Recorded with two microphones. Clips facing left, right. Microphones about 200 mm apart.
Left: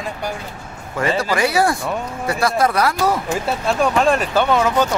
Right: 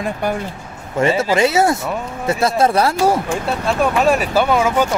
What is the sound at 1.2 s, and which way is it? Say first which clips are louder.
Speech: right 1 dB; 25° right (ahead or behind).